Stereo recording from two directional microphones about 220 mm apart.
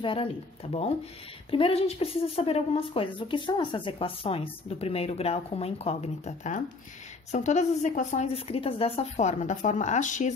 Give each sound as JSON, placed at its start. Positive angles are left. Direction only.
{"t": 0.0, "sound": "a woman's voice", "side_deg": 25}
{"t": 1.5, "sound": "a woman's voice", "side_deg": 25}